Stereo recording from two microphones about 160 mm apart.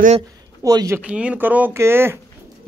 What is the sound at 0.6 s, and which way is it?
Speech, 20° right (ahead or behind).